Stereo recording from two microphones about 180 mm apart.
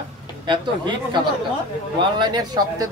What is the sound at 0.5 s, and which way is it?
Speech, 25° right (ahead or behind).